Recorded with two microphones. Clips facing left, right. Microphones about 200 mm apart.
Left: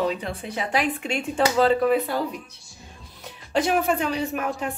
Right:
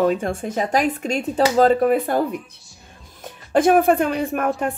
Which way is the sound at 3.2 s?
50° right (ahead or behind).